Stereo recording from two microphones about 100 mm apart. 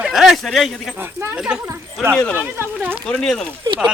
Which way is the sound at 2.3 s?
20° right (ahead or behind).